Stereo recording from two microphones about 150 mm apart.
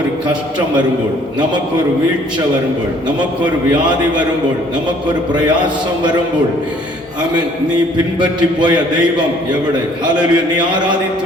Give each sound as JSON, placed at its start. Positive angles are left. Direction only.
{"t": 7.9, "sound": "a man's voice", "side_deg": -30}
{"t": 10.1, "sound": "a man's voice", "side_deg": -30}